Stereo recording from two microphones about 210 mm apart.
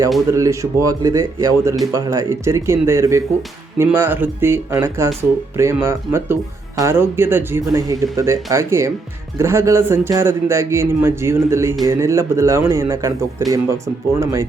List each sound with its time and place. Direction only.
0.3 s a man's voice: 15° right (ahead or behind)